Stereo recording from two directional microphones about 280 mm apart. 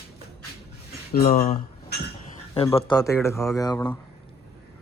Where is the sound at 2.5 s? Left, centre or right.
Centre.